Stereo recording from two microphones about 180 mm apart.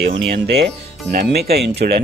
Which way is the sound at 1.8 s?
60° right (ahead or behind).